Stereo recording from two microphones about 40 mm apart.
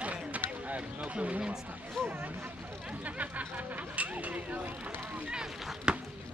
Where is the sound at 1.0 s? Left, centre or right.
Right.